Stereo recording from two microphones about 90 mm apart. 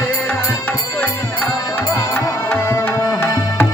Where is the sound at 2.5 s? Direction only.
25° left (ahead or behind).